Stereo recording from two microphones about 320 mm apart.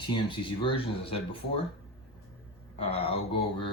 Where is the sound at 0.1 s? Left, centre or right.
Centre.